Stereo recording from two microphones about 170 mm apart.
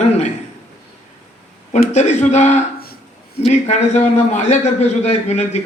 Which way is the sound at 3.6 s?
45° left (ahead or behind).